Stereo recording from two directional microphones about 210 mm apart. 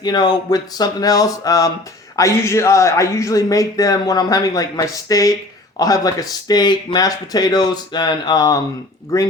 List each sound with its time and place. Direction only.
0.0 s speech: 20° left (ahead or behind)